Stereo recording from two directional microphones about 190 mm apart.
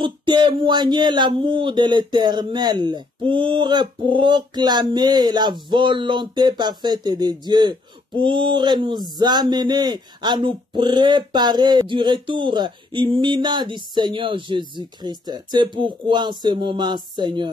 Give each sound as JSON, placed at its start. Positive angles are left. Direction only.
{"t": 0.0, "sound": "speech", "side_deg": -25}